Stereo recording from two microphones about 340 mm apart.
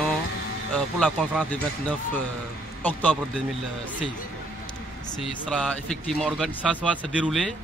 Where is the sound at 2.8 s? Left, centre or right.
Centre.